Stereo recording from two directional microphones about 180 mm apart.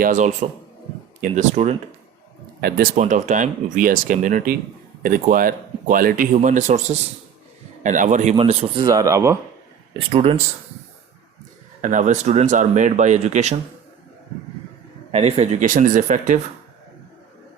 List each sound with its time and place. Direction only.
0.0 s speech: 45° right (ahead or behind)
2.6 s speech: 60° right (ahead or behind)
2.9 s speech: 40° right (ahead or behind); by 9.4 s 15° right (ahead or behind)
9.9 s speech: 30° right (ahead or behind)
11.8 s speech: 45° right (ahead or behind)
15.1 s speech: 35° right (ahead or behind)